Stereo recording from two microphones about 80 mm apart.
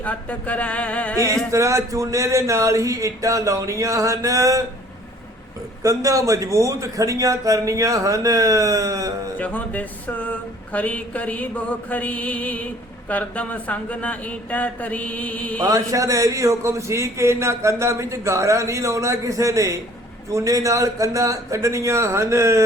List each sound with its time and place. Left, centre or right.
0.0 s speech: centre
1.5 s a man's voice: right
5.8 s a man's voice: right
9.4 s speech: centre
15.6 s a man's voice: right